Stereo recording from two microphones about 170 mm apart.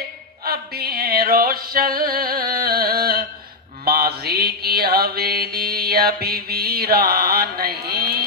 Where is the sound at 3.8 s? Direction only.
65° right (ahead or behind).